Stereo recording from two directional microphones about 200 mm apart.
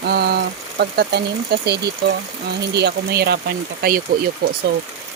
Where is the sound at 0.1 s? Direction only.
50° right (ahead or behind).